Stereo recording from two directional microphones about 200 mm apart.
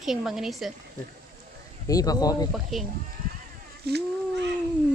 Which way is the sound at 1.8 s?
20° left (ahead or behind).